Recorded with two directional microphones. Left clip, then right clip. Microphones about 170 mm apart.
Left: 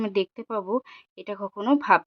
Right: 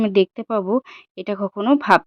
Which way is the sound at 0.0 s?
30° right (ahead or behind).